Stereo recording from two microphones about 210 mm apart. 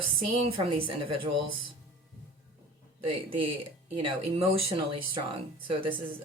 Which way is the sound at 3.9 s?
25° right (ahead or behind).